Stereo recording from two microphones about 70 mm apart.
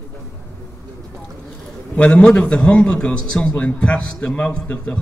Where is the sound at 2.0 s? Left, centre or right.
Centre.